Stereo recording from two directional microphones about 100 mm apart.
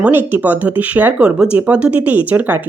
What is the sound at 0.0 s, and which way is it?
Speech, 20° right (ahead or behind).